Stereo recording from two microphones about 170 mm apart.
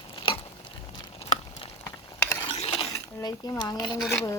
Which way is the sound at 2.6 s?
35° left (ahead or behind).